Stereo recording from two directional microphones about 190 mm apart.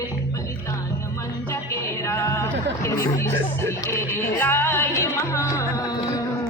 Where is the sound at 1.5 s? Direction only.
15° left (ahead or behind).